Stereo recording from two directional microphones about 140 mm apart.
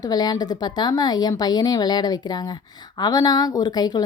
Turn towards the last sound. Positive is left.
turn(degrees=30)  # may be behind; listen again after turning